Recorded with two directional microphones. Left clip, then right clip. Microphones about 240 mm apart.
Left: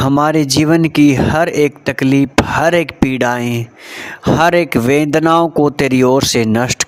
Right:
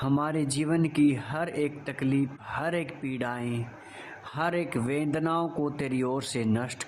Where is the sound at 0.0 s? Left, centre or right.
Left.